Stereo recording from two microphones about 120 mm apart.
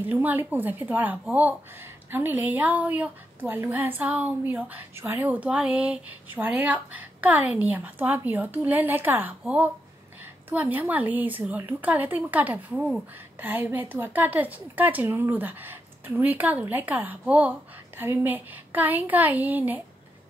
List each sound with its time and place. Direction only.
0.0 s a woman's voice: 15° right (ahead or behind)